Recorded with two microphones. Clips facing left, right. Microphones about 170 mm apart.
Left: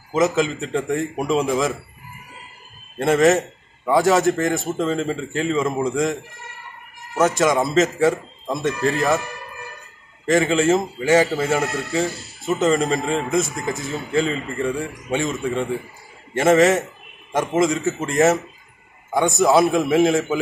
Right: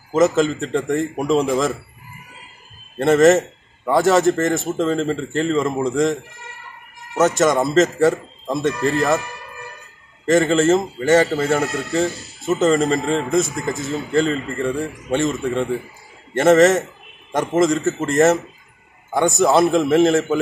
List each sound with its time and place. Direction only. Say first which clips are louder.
0.1 s a man's voice: right 3 dB; centre (ahead or behind)
3.0 s a man's voice: right 3 dB; centre (ahead or behind)
7.2 s a man's voice: right 2 dB; centre (ahead or behind)
10.2 s a man's voice: right 2 dB; centre (ahead or behind)